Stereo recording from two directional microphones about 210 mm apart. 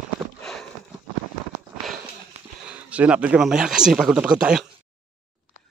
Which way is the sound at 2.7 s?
5° right (ahead or behind).